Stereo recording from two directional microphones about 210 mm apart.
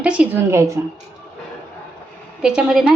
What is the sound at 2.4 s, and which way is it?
Speech, 5° right (ahead or behind).